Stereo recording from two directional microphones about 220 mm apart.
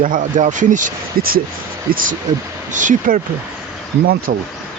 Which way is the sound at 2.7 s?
35° right (ahead or behind).